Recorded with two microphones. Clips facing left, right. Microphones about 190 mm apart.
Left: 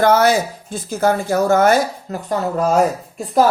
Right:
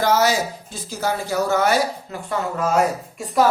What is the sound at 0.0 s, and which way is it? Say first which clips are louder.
Speech: left 5 dB; 55° left (ahead or behind).